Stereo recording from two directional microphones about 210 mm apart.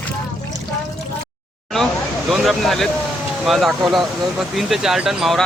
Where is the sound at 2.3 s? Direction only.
Centre (ahead or behind).